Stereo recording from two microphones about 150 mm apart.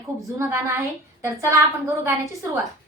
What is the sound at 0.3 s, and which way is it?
A woman's voice, 20° right (ahead or behind).